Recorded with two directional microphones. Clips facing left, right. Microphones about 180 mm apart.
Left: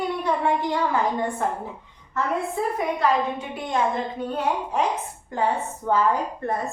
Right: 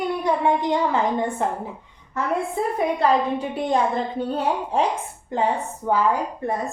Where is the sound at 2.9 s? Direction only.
35° right (ahead or behind).